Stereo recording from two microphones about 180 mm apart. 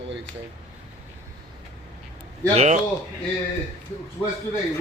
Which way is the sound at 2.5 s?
40° right (ahead or behind).